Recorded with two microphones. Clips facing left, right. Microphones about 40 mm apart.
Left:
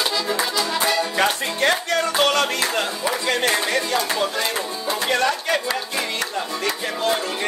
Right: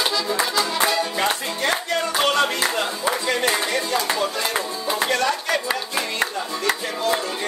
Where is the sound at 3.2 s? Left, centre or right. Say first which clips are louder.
Left 2 dB; left.